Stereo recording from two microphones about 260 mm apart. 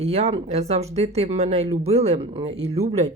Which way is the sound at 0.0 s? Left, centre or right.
Right.